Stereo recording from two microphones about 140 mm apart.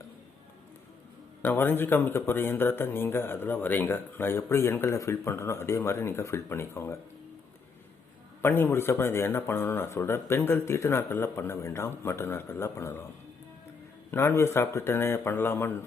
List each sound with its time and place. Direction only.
1.4 s speech: 15° left (ahead or behind)
8.4 s speech: 15° left (ahead or behind)
14.1 s speech: 20° left (ahead or behind)